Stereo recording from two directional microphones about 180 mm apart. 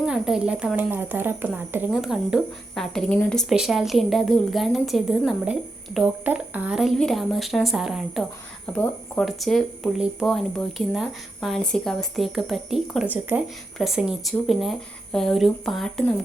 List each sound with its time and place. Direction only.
0.0 s a woman's voice: 5° right (ahead or behind)